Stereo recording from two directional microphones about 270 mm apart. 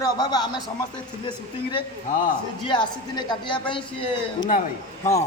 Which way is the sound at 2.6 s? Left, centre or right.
Centre.